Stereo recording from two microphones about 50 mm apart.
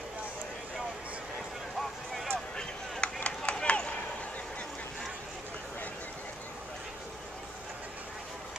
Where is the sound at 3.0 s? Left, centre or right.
Centre.